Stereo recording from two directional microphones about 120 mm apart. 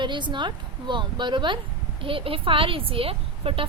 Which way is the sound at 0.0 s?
40° right (ahead or behind).